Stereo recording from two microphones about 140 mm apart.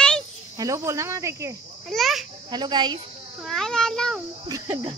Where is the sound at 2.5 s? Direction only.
30° right (ahead or behind).